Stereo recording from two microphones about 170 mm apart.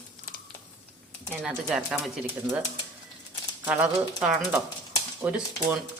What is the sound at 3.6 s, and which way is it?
Speech, 10° right (ahead or behind).